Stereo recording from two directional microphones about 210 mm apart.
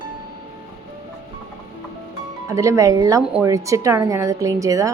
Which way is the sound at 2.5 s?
15° right (ahead or behind).